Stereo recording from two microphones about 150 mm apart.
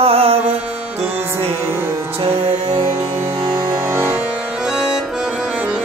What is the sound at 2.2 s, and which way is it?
Music, 40° right (ahead or behind).